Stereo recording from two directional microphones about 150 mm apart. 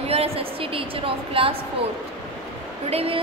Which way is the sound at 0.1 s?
40° right (ahead or behind).